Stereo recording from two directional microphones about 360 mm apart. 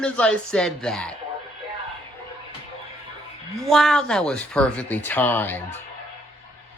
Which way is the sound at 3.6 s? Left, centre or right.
Centre.